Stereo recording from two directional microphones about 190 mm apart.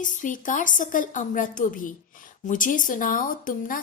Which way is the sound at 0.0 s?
40° left (ahead or behind).